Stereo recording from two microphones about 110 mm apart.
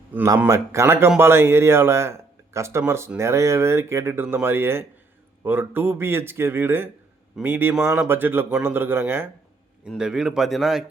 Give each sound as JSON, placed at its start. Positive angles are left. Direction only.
{"t": 0.4, "sound": "speech", "side_deg": -30}
{"t": 10.0, "sound": "speech", "side_deg": -5}